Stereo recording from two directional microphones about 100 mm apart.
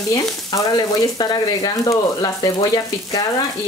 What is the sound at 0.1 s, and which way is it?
Frying, 40° left (ahead or behind).